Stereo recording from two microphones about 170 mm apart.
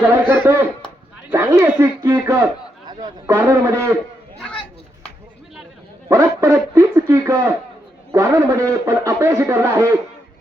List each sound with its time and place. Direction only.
0.2 s a man's voice: 10° right (ahead or behind)
1.3 s a sound: 15° right (ahead or behind)
3.2 s a man's voice: 15° right (ahead or behind)
6.1 s a man's voice: 15° right (ahead or behind)